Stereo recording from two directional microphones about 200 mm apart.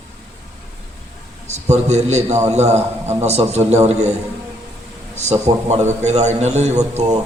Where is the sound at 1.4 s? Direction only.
35° right (ahead or behind).